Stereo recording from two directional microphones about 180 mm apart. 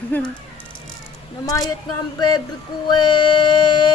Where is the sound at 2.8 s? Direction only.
25° left (ahead or behind).